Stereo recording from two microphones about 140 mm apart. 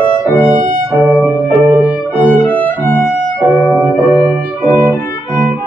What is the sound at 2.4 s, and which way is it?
Music, 15° left (ahead or behind).